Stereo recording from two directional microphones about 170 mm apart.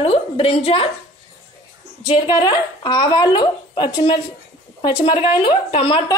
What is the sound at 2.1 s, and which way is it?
A woman's voice, 25° left (ahead or behind).